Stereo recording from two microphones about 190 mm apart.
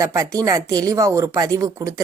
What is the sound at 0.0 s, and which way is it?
A woman's voice, 15° right (ahead or behind).